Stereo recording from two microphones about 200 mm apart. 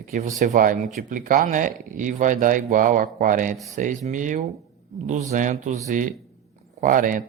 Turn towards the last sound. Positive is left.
turn(degrees=-45)  # may be behind; listen again after turning